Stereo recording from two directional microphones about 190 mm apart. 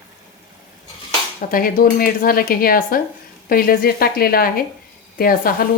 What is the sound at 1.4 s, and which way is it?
Speech, 50° left (ahead or behind).